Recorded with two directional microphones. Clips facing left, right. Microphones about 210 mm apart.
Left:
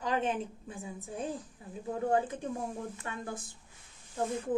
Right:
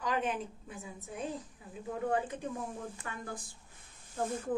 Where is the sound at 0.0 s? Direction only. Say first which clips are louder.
Left 2 dB; 25° left (ahead or behind).